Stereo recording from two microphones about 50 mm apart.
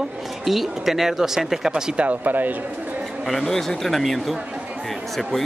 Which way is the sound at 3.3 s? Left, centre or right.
Centre.